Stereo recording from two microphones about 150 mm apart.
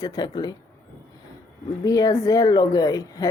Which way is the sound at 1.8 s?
25° left (ahead or behind).